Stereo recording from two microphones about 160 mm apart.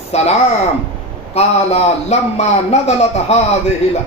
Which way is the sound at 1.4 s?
40° left (ahead or behind).